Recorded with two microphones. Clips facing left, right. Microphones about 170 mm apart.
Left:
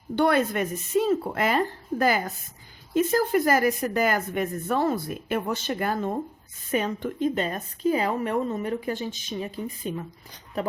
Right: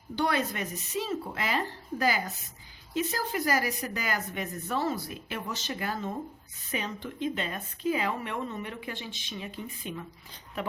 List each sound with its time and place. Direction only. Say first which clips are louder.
0.2 s a woman's voice: left 7 dB; 55° left (ahead or behind); by 10.7 s 40° left (ahead or behind)